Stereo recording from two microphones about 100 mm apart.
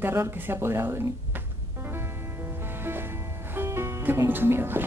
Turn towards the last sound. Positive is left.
turn(degrees=-25)  # may be behind; listen again after turning